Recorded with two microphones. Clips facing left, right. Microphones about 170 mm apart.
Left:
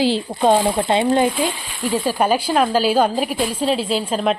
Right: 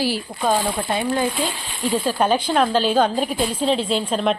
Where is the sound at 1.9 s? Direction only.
10° left (ahead or behind).